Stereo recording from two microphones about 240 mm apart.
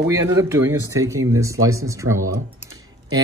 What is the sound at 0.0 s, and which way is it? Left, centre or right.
Speech, centre.